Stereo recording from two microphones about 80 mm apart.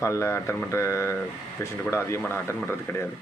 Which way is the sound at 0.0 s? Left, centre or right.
Left.